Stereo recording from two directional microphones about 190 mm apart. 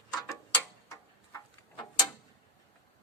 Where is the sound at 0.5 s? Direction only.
15° left (ahead or behind).